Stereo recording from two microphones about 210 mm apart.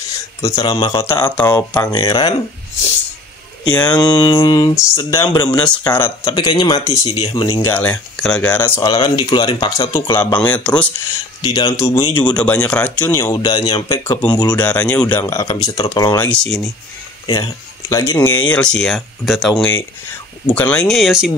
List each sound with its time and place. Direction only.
0.4 s speech: 15° left (ahead or behind)
1.9 s speech: 20° left (ahead or behind)
3.8 s speech: 20° left (ahead or behind)
5.7 s speech: 10° left (ahead or behind)
7.6 s speech: 10° left (ahead or behind)
11.4 s speech: 20° left (ahead or behind)
14.6 s speech: 5° left (ahead or behind)
16.3 s speech: 5° left (ahead or behind)
17.3 s speech: 15° left (ahead or behind); by 21.3 s centre (ahead or behind)